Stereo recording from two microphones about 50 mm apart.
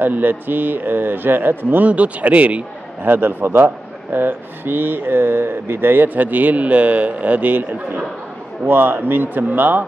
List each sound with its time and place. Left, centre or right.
0.0 s a man's voice: right
1.9 s a man's voice: right